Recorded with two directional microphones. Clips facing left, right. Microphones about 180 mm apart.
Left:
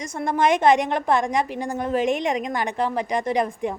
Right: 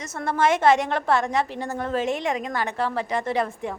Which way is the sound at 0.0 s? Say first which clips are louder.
Left 1 dB; 15° left (ahead or behind).